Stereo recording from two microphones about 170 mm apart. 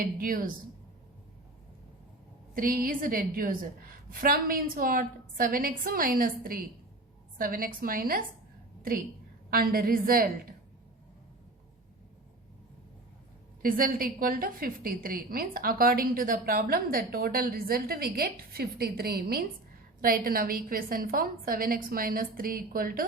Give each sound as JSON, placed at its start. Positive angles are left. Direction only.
{"t": 0.0, "sound": "a woman's voice", "side_deg": -55}
{"t": 2.6, "sound": "a woman's voice", "side_deg": -60}
{"t": 9.5, "sound": "a woman's voice", "side_deg": -60}
{"t": 13.6, "sound": "a woman's voice", "side_deg": -55}